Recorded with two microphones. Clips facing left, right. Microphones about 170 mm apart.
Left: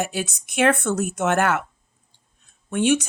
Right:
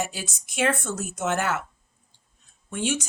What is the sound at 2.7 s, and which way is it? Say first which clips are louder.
Speech: left 8 dB; 60° left (ahead or behind).